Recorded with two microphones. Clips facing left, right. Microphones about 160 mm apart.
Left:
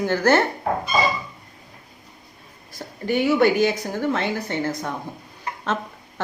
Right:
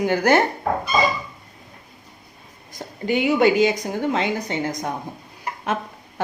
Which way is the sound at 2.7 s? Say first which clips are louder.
Even; 15° right (ahead or behind).